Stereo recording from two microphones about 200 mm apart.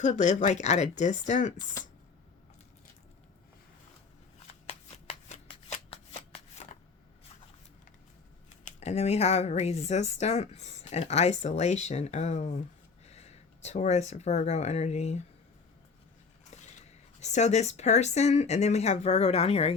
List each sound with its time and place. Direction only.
0.0 s speech: 35° left (ahead or behind)
1.8 s speech: 15° left (ahead or behind)
5.0 s shuffling cards: 35° left (ahead or behind)
8.6 s speech: 35° left (ahead or behind)
16.5 s speech: 35° left (ahead or behind)